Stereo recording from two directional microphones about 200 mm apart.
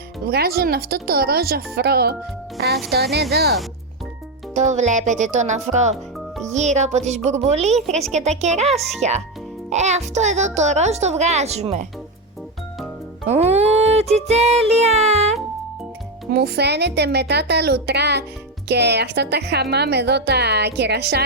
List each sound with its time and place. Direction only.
0.3 s speech: 50° right (ahead or behind)
4.5 s a child's voice: 35° right (ahead or behind)
13.2 s a child's voice: 30° right (ahead or behind)
16.3 s a woman's voice: 55° right (ahead or behind)